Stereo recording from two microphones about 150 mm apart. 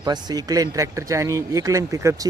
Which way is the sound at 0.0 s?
25° right (ahead or behind).